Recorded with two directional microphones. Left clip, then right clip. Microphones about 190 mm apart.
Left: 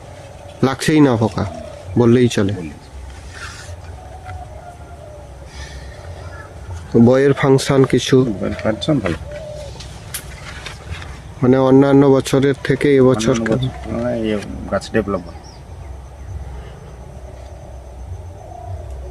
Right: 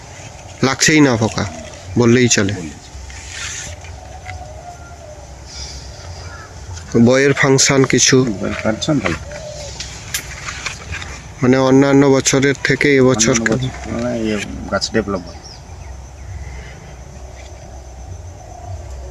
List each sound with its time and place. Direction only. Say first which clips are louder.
0.6 s speech: right 2 dB; 10° left (ahead or behind)
7.1 s speech: right 1 dB; 15° left (ahead or behind)
11.3 s speech: even; 10° left (ahead or behind)
14.9 s speech: left 2 dB; centre (ahead or behind)